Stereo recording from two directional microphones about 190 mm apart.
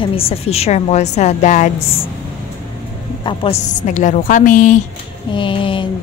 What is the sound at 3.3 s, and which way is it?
A woman's voice, 35° left (ahead or behind).